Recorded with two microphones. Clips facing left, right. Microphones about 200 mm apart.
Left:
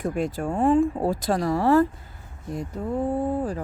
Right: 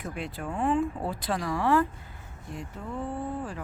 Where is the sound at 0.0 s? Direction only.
45° left (ahead or behind).